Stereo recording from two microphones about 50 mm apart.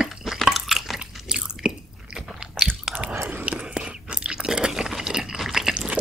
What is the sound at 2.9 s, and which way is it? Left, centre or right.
Whispering, centre.